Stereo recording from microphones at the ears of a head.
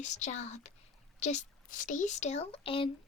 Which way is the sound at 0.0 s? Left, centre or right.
Left.